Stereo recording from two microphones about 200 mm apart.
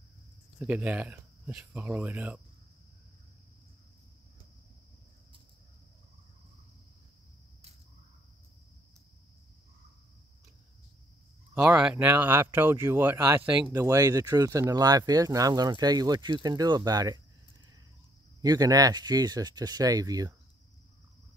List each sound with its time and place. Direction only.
0.6 s speech: 10° right (ahead or behind)
11.5 s speech: 5° right (ahead or behind)
18.4 s speech: 20° right (ahead or behind)